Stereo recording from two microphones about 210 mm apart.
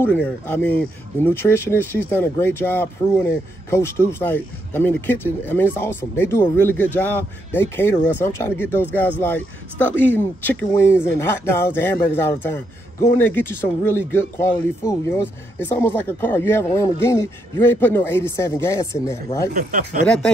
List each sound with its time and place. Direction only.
0.0 s speech: 10° left (ahead or behind)
10.4 s speech: 10° left (ahead or behind)
19.5 s speech: 40° right (ahead or behind)